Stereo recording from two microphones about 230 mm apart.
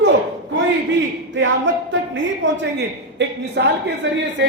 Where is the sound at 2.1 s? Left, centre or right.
Right.